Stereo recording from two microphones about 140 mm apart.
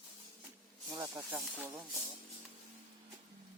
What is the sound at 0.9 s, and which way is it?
Speech, 25° right (ahead or behind).